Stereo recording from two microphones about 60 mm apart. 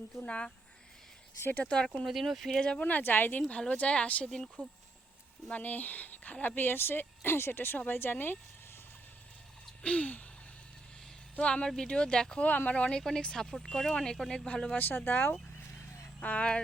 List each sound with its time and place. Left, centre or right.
0.2 s speech: centre
1.4 s speech: left
1.6 s speech: centre
2.0 s speech: centre
2.6 s speech: centre
2.8 s speech: left
3.5 s speech: centre
9.8 s speech: left
11.3 s speech: centre
12.5 s speech: left
14.8 s speech: left
16.2 s speech: left